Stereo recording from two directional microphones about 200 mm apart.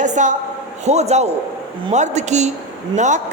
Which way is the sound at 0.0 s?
40° right (ahead or behind).